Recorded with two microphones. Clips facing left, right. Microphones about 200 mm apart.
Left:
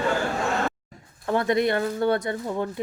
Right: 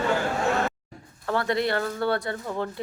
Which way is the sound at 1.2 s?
20° left (ahead or behind).